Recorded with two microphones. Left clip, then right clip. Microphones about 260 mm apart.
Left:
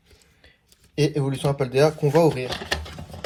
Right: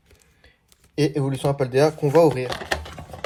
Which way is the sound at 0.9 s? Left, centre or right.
Right.